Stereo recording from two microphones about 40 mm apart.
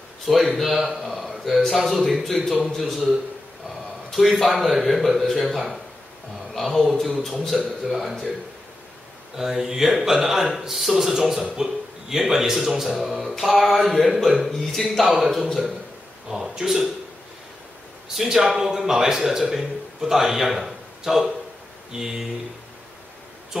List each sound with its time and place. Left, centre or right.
0.3 s speech: centre
9.4 s speech: centre
16.3 s speech: centre
18.1 s a man's voice: centre